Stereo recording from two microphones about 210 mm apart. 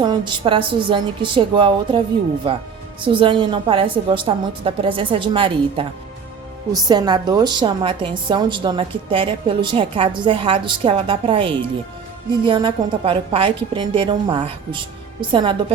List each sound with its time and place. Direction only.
0.0 s a woman's voice: 20° right (ahead or behind)
6.8 s a woman's voice: 20° right (ahead or behind)